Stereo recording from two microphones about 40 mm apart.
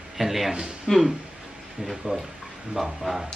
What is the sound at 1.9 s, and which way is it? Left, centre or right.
Speech, centre.